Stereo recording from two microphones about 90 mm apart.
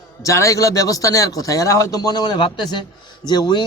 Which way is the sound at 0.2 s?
35° left (ahead or behind).